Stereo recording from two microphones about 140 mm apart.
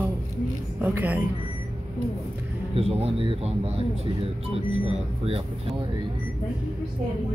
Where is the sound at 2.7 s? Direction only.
45° right (ahead or behind).